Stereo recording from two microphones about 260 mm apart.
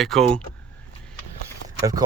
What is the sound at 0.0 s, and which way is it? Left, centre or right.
Speech, centre.